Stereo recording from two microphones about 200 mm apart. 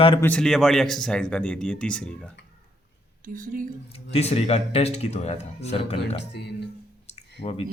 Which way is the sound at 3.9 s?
30° left (ahead or behind).